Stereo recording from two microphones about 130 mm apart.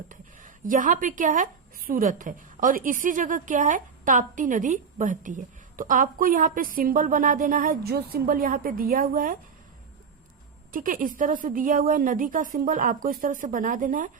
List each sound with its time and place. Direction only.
0.1 s a woman's voice: 90° right
10.7 s a woman's voice: 90° right